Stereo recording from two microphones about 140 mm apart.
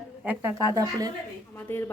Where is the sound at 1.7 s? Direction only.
15° left (ahead or behind).